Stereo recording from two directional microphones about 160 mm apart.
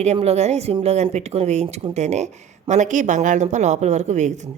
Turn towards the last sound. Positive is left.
turn(degrees=-45)  # may be behind; listen again after turning